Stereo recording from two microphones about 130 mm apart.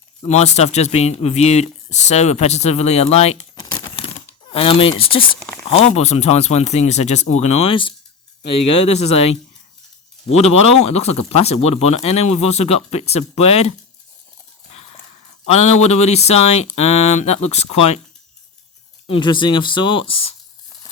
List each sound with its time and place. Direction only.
0.3 s speech: 60° left (ahead or behind)
3.5 s crumpling: 35° left (ahead or behind)
4.4 s speech: 45° left (ahead or behind)
5.6 s speech: 55° left (ahead or behind)
8.6 s speech: 55° left (ahead or behind)
15.4 s speech: 55° left (ahead or behind)
19.0 s speech: 40° left (ahead or behind)